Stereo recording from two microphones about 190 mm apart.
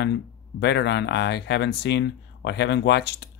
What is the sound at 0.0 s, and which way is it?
Speech, 65° left (ahead or behind).